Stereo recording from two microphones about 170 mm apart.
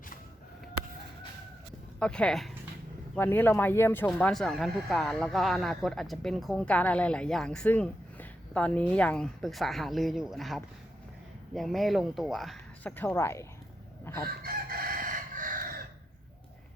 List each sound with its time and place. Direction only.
2.0 s speech: 5° left (ahead or behind)
13.0 s speech: 10° left (ahead or behind)
14.0 s chicken: 15° left (ahead or behind)
14.3 s chicken: 60° right (ahead or behind)